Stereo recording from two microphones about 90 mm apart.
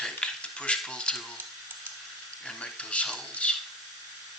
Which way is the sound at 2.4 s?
10° left (ahead or behind).